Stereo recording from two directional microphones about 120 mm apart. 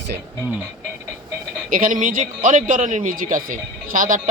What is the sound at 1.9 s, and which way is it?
A man's voice, 90° right.